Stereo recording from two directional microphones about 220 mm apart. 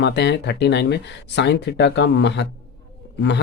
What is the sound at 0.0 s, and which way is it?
Speech, 50° left (ahead or behind).